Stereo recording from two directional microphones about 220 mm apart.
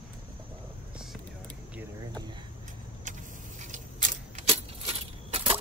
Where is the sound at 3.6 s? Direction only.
35° right (ahead or behind).